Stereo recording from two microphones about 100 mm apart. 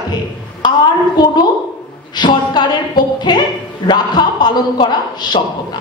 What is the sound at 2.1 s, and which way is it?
A woman's voice, 45° left (ahead or behind).